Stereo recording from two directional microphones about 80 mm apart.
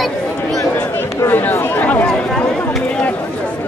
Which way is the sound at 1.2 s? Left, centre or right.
Left.